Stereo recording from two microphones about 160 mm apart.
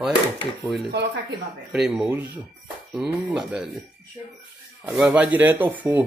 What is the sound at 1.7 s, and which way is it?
Speech, 5° right (ahead or behind).